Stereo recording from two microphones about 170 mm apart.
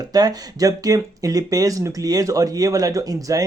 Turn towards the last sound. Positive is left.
turn(degrees=-20)  # may be behind; listen again after turning